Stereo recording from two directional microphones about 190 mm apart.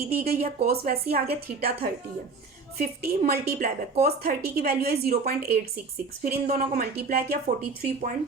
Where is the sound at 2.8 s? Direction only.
45° right (ahead or behind).